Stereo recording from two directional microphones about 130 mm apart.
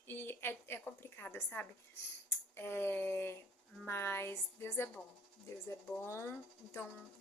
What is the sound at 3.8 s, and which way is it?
A woman's voice, 20° left (ahead or behind).